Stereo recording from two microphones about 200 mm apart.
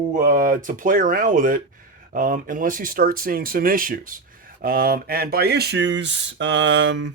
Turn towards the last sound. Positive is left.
turn(degrees=-65)  # may be behind; listen again after turning